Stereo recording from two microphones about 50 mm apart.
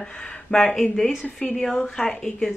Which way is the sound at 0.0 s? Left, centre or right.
Centre.